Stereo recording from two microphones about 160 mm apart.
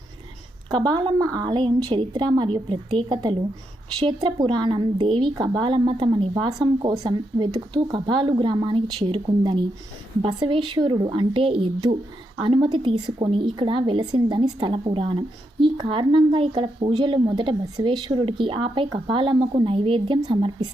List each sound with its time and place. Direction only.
0.7 s a woman's voice: 25° right (ahead or behind)